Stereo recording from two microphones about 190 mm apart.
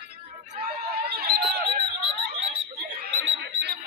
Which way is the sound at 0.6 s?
50° right (ahead or behind).